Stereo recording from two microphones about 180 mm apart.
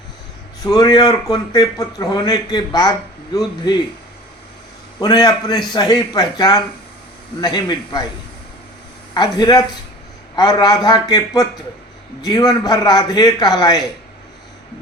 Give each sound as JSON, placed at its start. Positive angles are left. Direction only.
{"t": 0.6, "sound": "a man's voice", "side_deg": 20}
{"t": 4.9, "sound": "a man's voice", "side_deg": 20}
{"t": 9.1, "sound": "a man's voice", "side_deg": 20}